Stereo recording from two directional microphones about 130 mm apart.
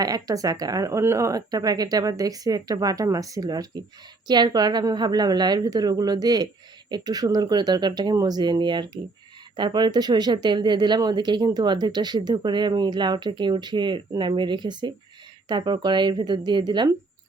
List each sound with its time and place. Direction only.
0.0 s speech: 30° right (ahead or behind)